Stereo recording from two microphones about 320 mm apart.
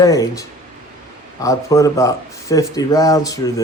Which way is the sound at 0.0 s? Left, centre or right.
Centre.